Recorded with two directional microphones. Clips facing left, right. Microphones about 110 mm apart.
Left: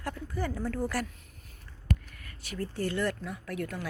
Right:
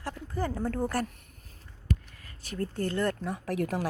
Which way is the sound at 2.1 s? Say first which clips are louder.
Left 1 dB; 25° right (ahead or behind).